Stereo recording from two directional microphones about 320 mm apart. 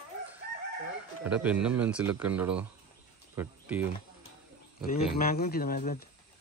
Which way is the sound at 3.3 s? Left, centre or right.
Centre.